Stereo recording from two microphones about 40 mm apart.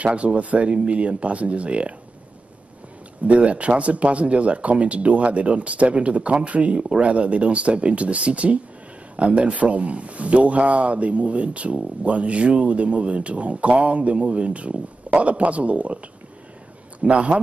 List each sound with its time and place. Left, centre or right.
0.0 s speech: right
3.3 s speech: right
17.0 s speech: right